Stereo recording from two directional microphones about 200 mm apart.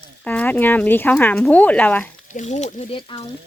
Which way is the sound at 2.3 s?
35° left (ahead or behind).